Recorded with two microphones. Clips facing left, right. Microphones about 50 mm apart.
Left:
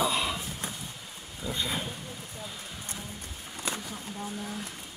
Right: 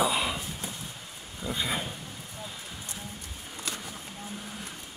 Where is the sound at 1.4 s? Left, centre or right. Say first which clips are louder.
Right 1 dB; centre.